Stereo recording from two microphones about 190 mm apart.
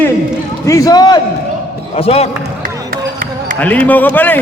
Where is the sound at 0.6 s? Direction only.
15° left (ahead or behind).